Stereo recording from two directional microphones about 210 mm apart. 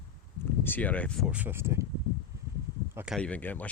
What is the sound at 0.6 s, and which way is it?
Speech, 10° left (ahead or behind).